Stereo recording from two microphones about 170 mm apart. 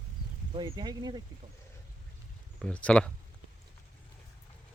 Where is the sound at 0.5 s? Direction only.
25° right (ahead or behind).